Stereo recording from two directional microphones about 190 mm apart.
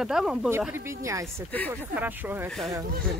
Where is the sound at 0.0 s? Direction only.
5° right (ahead or behind).